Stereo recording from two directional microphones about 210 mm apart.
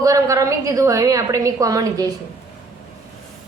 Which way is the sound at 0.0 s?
15° right (ahead or behind).